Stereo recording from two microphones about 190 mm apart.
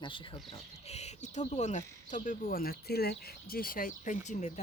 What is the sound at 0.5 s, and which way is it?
Speech, 35° left (ahead or behind).